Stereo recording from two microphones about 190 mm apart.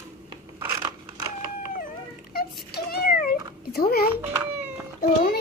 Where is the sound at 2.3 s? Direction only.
55° left (ahead or behind).